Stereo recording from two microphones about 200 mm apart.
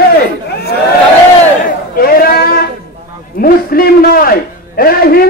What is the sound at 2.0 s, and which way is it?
A man's voice, 45° left (ahead or behind).